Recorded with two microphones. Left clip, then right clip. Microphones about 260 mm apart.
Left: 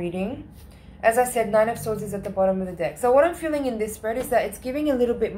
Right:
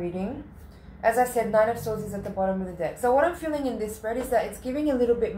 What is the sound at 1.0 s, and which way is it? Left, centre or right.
A woman's voice, left.